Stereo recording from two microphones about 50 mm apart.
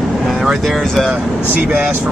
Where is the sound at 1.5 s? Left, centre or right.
Right.